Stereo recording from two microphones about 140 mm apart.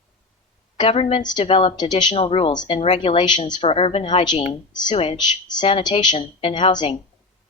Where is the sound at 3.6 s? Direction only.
45° left (ahead or behind).